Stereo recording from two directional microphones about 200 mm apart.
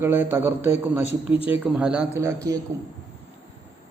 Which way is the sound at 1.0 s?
30° left (ahead or behind).